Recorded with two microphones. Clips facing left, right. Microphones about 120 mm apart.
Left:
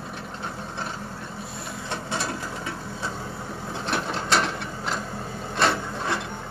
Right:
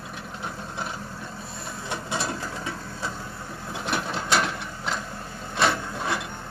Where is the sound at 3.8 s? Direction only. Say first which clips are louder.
Left 1 dB; 5° right (ahead or behind).